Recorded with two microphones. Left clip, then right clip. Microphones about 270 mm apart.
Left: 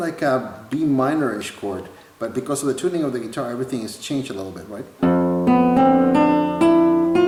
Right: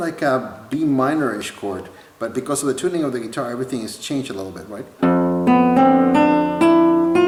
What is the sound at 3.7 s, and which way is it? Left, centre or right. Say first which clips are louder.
Speech: right 1 dB; centre.